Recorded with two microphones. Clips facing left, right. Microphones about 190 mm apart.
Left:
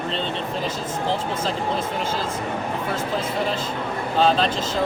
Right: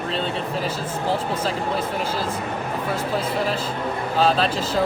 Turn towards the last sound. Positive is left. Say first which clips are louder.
# even
turn(degrees=-5)  # may be behind; listen again after turning